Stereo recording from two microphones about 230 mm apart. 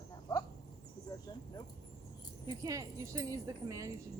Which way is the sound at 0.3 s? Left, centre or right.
Centre.